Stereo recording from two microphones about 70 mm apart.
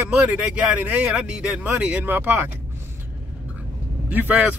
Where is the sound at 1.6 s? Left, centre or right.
Right.